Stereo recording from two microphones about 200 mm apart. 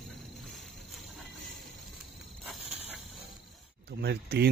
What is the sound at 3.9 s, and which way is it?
Speech, 55° right (ahead or behind).